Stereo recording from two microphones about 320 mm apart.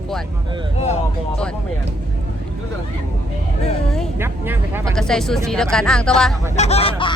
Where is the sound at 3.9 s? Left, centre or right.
Centre.